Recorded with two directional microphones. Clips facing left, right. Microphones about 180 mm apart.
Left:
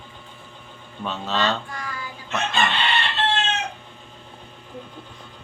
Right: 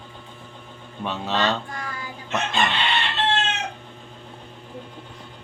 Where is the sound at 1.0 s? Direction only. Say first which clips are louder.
Right 1 dB; 15° right (ahead or behind).